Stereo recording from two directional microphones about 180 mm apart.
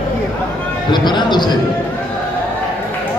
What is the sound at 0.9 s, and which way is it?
Speech, 25° left (ahead or behind).